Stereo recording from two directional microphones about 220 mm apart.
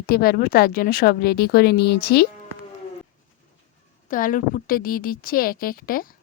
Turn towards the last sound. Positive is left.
turn(degrees=40)  # may be behind; listen again after turning